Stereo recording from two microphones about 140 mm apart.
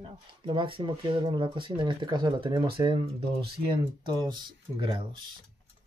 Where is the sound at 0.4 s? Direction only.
35° right (ahead or behind).